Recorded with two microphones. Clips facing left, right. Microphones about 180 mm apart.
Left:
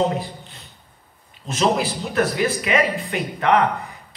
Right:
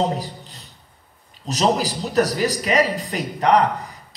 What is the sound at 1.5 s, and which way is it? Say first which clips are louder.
A man's voice: even; 40° right (ahead or behind).